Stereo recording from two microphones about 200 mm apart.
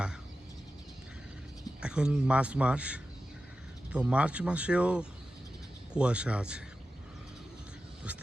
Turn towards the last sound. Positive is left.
turn(degrees=-5)  # may be behind; listen again after turning